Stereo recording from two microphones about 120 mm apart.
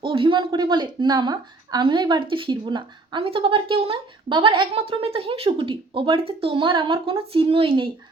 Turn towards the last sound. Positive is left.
turn(degrees=-50)  # may be behind; listen again after turning